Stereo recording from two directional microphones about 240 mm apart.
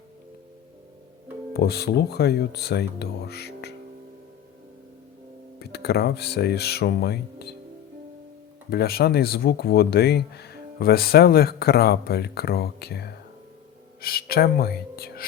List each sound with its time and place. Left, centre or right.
1.5 s speech: left
5.5 s speech: left
8.7 s speech: left